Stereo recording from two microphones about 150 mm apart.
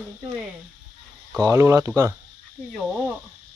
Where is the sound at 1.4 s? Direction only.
20° right (ahead or behind).